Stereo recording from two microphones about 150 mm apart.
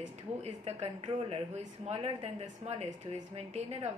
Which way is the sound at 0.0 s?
45° right (ahead or behind).